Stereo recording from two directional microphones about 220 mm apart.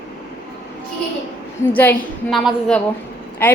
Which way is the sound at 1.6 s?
10° left (ahead or behind).